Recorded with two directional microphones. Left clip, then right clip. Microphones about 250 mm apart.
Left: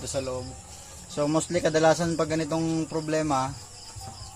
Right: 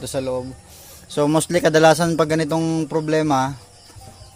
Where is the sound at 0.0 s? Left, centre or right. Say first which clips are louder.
Right 7 dB; right.